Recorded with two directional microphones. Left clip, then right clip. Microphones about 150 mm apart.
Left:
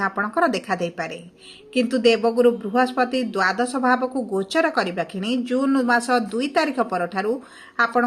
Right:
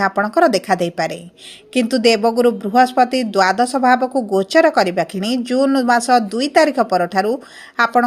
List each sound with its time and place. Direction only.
0.0 s speech: 50° right (ahead or behind)